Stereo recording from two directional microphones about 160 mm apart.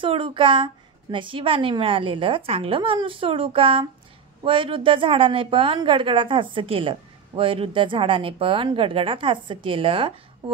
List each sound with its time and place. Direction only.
0.0 s a woman's voice: 30° right (ahead or behind)